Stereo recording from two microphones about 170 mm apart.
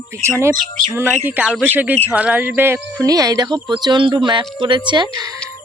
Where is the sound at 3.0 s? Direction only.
20° right (ahead or behind).